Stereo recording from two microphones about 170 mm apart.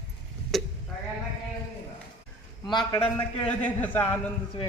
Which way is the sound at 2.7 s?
25° left (ahead or behind).